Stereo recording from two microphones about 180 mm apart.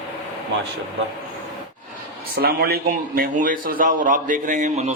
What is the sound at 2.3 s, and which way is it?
A man's voice, 60° right (ahead or behind).